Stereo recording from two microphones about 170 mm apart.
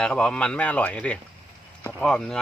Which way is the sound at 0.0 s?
5° left (ahead or behind).